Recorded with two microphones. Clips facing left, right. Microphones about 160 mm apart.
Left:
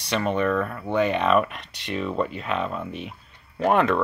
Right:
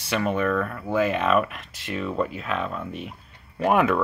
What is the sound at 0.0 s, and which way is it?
Speech, 5° right (ahead or behind).